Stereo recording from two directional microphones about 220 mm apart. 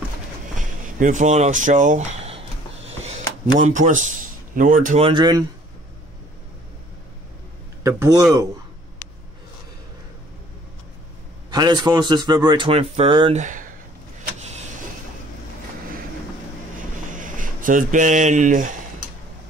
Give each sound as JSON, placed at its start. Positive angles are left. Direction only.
{"t": 0.6, "sound": "a sound", "side_deg": -35}
{"t": 3.7, "sound": "a man's voice", "side_deg": -35}
{"t": 7.8, "sound": "speech", "side_deg": -15}
{"t": 11.5, "sound": "a man's voice", "side_deg": -20}
{"t": 13.4, "sound": "speech", "side_deg": -35}
{"t": 16.7, "sound": "a sound", "side_deg": -35}